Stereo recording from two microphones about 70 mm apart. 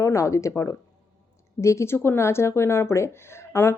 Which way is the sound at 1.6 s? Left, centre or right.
Left.